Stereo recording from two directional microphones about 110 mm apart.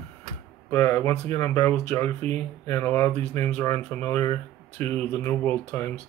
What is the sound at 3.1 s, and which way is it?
Speech, 80° right.